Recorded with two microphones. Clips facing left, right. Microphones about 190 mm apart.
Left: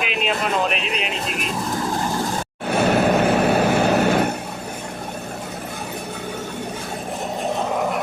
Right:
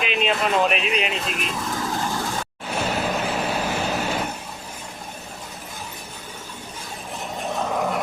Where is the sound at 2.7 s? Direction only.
60° left (ahead or behind).